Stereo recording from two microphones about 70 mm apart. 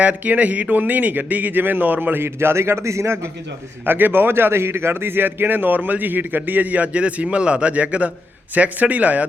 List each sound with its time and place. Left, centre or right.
0.0 s a man's voice: centre; by 3.2 s right
3.8 s a man's voice: right